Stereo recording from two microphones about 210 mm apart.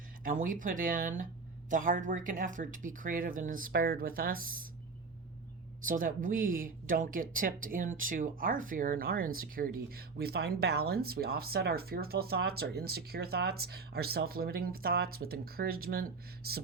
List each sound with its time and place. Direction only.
0.3 s speech: 40° right (ahead or behind)
5.8 s speech: 40° right (ahead or behind)